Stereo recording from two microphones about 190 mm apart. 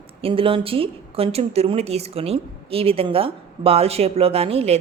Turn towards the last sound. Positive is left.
turn(degrees=-30)  # may be behind; listen again after turning